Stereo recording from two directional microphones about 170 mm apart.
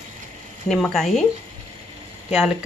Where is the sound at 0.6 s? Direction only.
Centre (ahead or behind).